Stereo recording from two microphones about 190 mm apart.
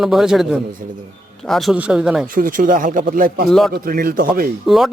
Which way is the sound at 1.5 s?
Centre (ahead or behind).